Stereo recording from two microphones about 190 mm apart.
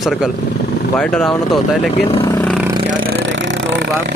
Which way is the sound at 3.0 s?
75° right (ahead or behind).